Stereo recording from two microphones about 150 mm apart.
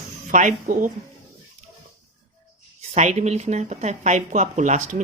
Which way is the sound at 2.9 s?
50° right (ahead or behind).